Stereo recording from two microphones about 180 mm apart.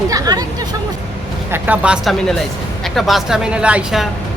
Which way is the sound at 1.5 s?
10° right (ahead or behind).